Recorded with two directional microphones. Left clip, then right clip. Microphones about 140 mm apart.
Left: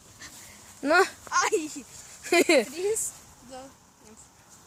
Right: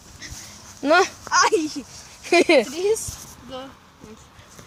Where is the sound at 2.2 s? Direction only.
40° left (ahead or behind).